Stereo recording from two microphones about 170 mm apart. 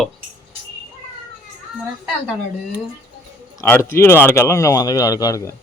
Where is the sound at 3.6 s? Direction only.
15° left (ahead or behind).